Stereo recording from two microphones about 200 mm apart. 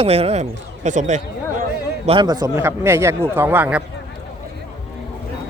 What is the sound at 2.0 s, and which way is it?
Speech, 25° right (ahead or behind).